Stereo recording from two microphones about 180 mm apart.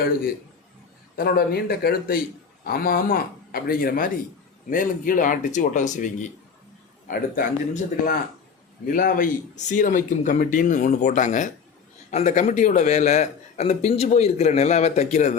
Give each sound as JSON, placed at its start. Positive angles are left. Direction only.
{"t": 1.1, "sound": "a man's voice", "side_deg": 60}